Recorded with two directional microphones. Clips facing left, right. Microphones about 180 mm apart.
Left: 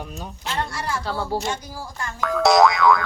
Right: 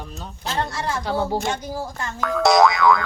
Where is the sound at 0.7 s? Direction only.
25° right (ahead or behind).